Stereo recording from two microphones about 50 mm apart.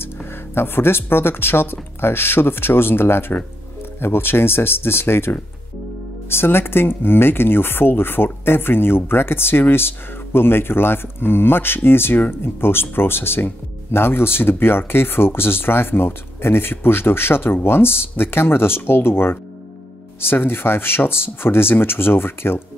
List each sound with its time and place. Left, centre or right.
0.0 s speech: left